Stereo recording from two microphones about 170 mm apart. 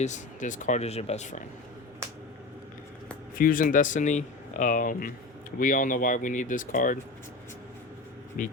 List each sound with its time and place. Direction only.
0.0 s speech: 45° left (ahead or behind)
3.3 s speech: 55° left (ahead or behind)
8.4 s speech: 50° left (ahead or behind)